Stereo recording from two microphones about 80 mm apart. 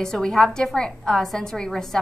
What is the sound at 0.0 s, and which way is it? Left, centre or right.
A woman's voice, centre.